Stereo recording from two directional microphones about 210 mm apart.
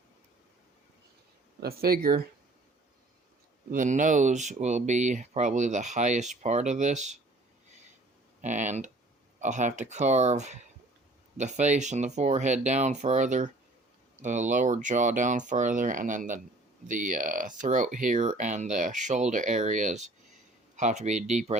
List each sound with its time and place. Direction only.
1.6 s speech: 45° right (ahead or behind)
3.7 s speech: 35° right (ahead or behind)
8.4 s speech: 35° right (ahead or behind)